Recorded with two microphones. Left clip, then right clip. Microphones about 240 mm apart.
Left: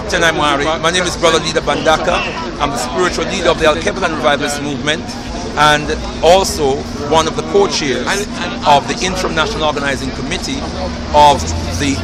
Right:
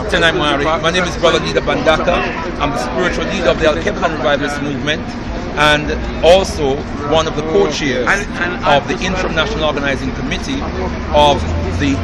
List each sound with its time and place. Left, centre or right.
0.1 s speech: centre
8.0 s speech: left
8.7 s speech: centre
11.1 s speech: centre